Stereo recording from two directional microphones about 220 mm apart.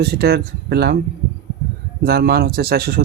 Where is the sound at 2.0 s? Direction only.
45° right (ahead or behind).